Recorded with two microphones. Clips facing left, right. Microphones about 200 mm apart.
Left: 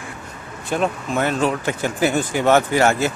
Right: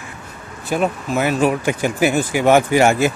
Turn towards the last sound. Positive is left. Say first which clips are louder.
# right 3 dB
turn(degrees=-15)  # may be behind; listen again after turning